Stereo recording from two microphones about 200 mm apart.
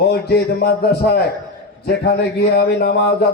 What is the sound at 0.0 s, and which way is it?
A man's voice, 55° left (ahead or behind).